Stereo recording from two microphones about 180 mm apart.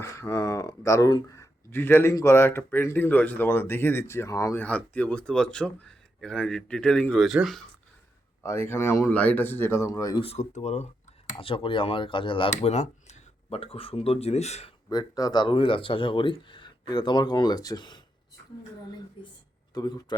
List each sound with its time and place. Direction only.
0.0 s speech: 15° left (ahead or behind); by 7.6 s centre (ahead or behind)
8.4 s speech: 15° left (ahead or behind)
10.2 s speech: 40° left (ahead or behind)
14.8 s speech: 20° left (ahead or behind)
19.7 s speech: 25° left (ahead or behind)